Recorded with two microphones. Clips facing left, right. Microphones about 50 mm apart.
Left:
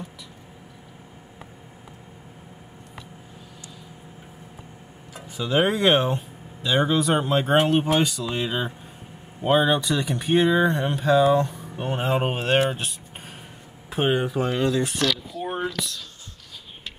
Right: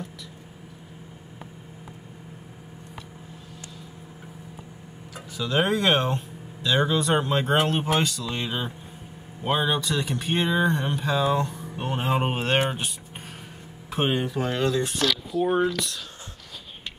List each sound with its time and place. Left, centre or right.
5.3 s speech: centre
9.7 s speech: left
9.9 s speech: centre
14.1 s speech: centre